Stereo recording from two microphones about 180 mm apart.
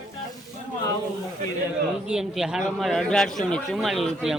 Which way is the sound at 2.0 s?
5° right (ahead or behind).